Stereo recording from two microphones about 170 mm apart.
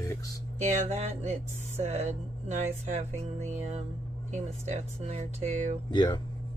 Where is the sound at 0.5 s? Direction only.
40° right (ahead or behind).